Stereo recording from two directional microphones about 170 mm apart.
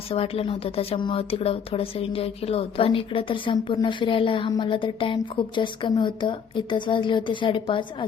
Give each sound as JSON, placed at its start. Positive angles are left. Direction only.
{"t": 0.1, "sound": "a woman's voice", "side_deg": 35}